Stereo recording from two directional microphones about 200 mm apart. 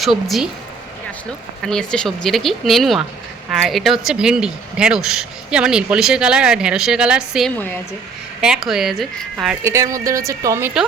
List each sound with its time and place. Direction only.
0.0 s speech: centre (ahead or behind)
1.6 s speech: 5° left (ahead or behind)
7.5 s a woman's voice: 10° left (ahead or behind)
8.4 s speech: 5° right (ahead or behind)
9.6 s speech: 15° right (ahead or behind)